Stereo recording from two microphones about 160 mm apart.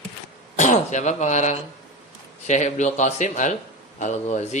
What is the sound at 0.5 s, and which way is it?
Speech, 50° left (ahead or behind).